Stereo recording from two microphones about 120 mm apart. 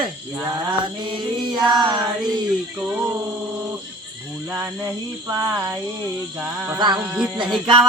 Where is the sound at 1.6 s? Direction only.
35° right (ahead or behind).